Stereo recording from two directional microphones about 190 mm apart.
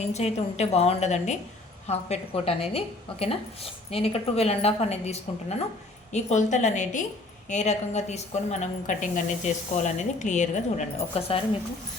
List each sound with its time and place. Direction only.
0.1 s a woman's voice: 35° left (ahead or behind)